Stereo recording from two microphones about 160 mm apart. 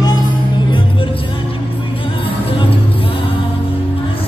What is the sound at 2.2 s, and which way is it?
Music, 35° left (ahead or behind).